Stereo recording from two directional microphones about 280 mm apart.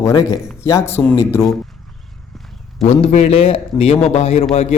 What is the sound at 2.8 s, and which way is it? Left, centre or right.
A man's voice, left.